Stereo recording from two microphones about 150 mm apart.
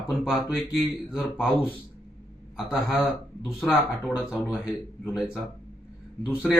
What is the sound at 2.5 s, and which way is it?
Speech, 5° right (ahead or behind).